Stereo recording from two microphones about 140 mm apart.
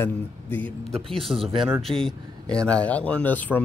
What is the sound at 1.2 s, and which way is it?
Speech, centre (ahead or behind).